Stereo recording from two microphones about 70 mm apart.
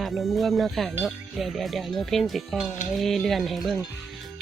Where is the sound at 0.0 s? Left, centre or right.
Centre.